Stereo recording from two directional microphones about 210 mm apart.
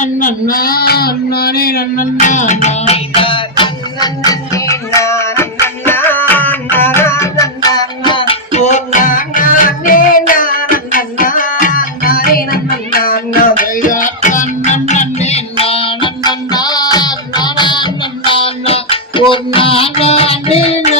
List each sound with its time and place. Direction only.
0.0 s male singing: 40° left (ahead or behind)
2.2 s music: 35° left (ahead or behind); by 8.2 s 20° left (ahead or behind)
8.3 s music: 35° left (ahead or behind)